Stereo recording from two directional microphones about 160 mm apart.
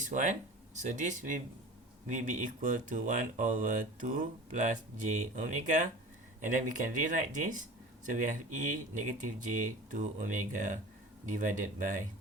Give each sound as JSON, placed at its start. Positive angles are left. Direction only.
{"t": 0.0, "sound": "speech", "side_deg": -50}